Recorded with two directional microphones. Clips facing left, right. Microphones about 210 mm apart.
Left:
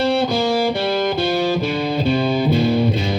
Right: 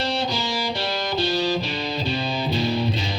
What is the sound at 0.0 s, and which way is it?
Music, 55° left (ahead or behind).